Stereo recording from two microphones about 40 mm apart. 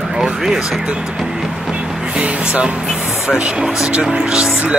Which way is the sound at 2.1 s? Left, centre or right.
Right.